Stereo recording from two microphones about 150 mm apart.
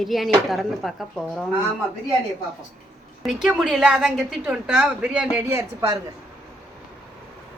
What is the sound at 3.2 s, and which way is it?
A woman's voice, 5° right (ahead or behind).